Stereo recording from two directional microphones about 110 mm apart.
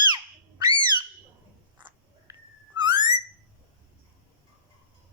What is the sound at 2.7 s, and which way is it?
Whistling, 45° right (ahead or behind).